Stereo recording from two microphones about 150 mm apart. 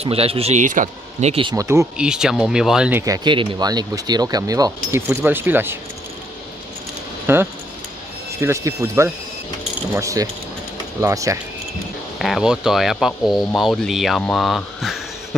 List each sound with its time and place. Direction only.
0.0 s speech: 40° right (ahead or behind); by 1.3 s 55° right (ahead or behind)
1.5 s speech: 20° right (ahead or behind)
2.0 s speech: 5° right (ahead or behind)
3.3 s speech: 30° right (ahead or behind)
7.3 s speech: 15° right (ahead or behind)
12.2 s speech: centre (ahead or behind)